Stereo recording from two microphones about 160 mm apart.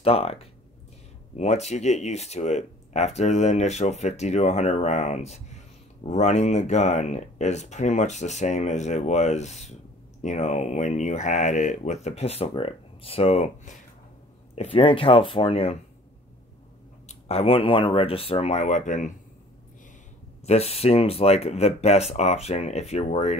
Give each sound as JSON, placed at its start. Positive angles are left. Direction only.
{"t": 0.0, "sound": "speech", "side_deg": 40}
{"t": 17.1, "sound": "speech", "side_deg": 40}
{"t": 20.4, "sound": "speech", "side_deg": 40}